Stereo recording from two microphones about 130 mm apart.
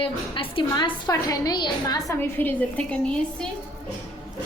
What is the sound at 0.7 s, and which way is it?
A woman's voice, 30° left (ahead or behind).